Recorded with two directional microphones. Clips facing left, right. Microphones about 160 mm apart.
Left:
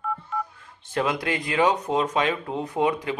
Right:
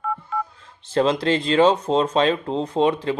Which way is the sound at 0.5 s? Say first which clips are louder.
Right 9 dB; 25° right (ahead or behind).